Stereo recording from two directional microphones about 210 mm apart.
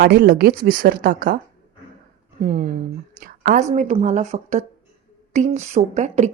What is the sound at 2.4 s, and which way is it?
Speech, 35° right (ahead or behind).